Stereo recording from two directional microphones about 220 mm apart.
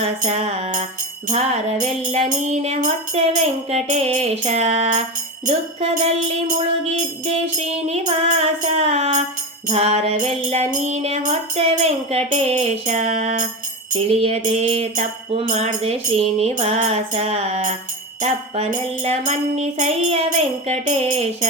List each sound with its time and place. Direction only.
0.0 s music: 30° right (ahead or behind)